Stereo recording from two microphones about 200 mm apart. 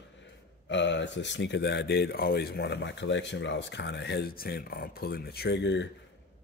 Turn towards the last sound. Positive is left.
turn(degrees=60)  # may be behind; listen again after turning